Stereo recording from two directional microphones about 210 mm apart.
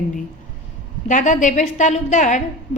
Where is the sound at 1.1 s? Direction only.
35° left (ahead or behind).